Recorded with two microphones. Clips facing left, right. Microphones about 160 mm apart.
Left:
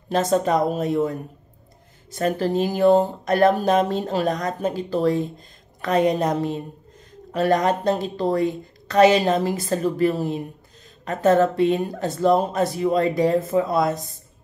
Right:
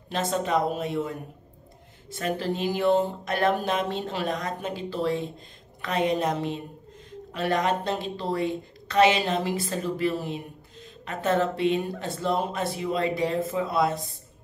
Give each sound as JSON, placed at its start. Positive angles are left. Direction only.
{"t": 0.1, "sound": "a woman's voice", "side_deg": 40}